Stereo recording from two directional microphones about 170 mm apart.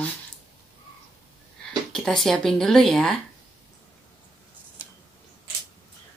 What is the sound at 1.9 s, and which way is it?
Speech, 5° left (ahead or behind).